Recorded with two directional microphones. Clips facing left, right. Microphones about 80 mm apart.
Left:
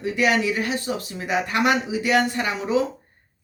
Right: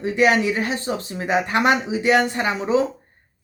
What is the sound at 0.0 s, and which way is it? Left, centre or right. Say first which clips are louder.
Speech: right 3 dB; right.